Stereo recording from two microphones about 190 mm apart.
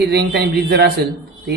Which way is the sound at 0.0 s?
60° right (ahead or behind).